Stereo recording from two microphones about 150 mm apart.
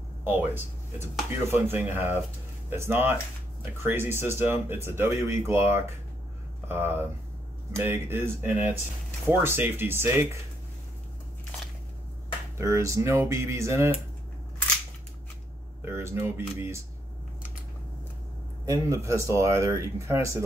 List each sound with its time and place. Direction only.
0.2 s speech: 15° right (ahead or behind)
1.5 s speech: 15° right (ahead or behind)
12.5 s speech: 20° right (ahead or behind)
15.8 s speech: 15° right (ahead or behind)
18.7 s speech: 20° right (ahead or behind)